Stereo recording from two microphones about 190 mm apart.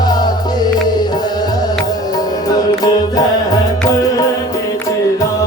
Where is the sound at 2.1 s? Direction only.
20° left (ahead or behind).